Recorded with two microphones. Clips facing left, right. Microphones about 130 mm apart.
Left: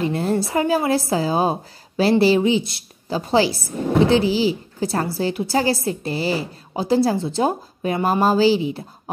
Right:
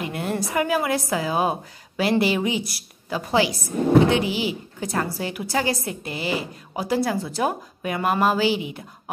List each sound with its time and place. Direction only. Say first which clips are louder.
0.0 s a woman's voice: left 6 dB; 30° left (ahead or behind)